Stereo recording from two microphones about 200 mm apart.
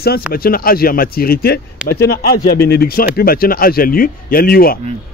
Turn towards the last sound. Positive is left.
turn(degrees=50)  # may be behind; listen again after turning